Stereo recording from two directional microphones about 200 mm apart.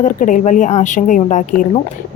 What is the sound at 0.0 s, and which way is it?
Speech, 40° left (ahead or behind).